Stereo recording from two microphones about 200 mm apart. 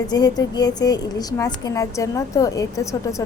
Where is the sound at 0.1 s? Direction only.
20° left (ahead or behind).